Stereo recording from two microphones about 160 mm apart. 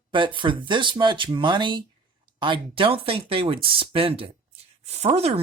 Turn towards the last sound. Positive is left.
turn(degrees=-40)  # may be behind; listen again after turning